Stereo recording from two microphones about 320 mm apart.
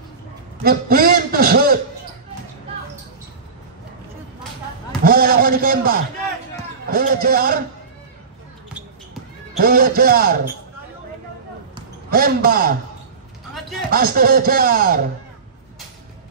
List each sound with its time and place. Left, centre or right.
0.7 s a sound: right
5.0 s a sound: right
6.9 s speech: right
9.6 s speech: right
12.1 s speech: right
13.8 s speech: right